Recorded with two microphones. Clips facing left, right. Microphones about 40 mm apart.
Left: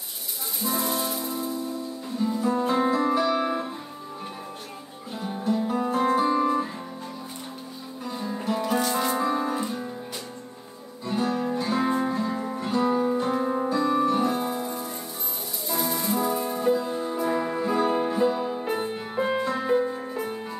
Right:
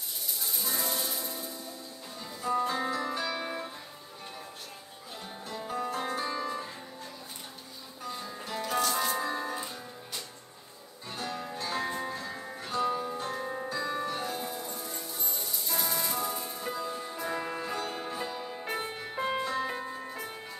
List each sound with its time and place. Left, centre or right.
0.7 s music: centre
2.3 s music: centre
5.2 s music: centre
8.2 s music: centre
11.1 s music: centre
12.5 s music: centre
13.7 s music: centre; by 14.9 s left
15.7 s music: centre
16.2 s music: left
16.6 s music: centre
17.7 s music: centre